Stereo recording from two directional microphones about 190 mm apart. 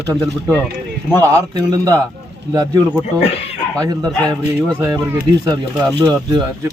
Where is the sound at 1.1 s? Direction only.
20° right (ahead or behind).